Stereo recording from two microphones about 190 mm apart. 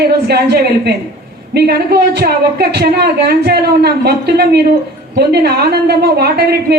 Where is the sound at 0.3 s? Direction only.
60° right (ahead or behind).